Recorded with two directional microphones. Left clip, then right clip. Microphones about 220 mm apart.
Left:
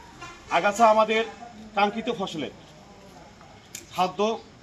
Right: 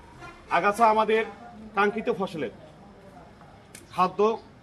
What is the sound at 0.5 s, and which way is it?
A man's voice, 30° left (ahead or behind).